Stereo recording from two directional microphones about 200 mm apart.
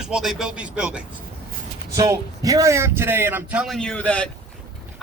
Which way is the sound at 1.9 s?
15° right (ahead or behind).